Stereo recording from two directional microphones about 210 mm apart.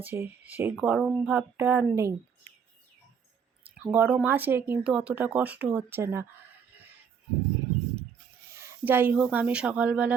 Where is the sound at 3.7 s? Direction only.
10° right (ahead or behind).